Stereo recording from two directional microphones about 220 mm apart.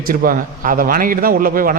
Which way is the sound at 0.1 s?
40° right (ahead or behind).